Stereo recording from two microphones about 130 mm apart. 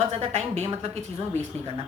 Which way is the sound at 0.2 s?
50° right (ahead or behind).